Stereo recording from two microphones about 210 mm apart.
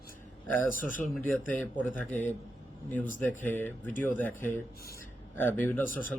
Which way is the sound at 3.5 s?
10° left (ahead or behind).